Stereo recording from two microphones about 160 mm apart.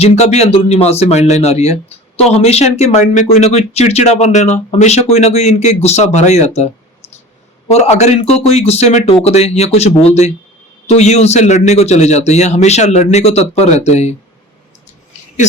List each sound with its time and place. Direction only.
0.0 s speech: 40° left (ahead or behind)
7.7 s speech: 45° left (ahead or behind)